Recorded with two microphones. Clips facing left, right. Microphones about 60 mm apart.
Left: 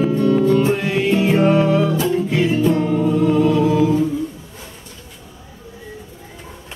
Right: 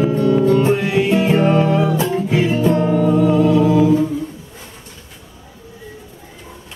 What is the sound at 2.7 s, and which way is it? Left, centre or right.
Music, right.